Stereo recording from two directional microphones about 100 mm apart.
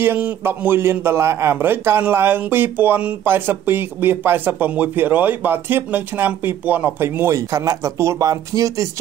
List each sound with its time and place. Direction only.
0.0 s a man's voice: 25° right (ahead or behind)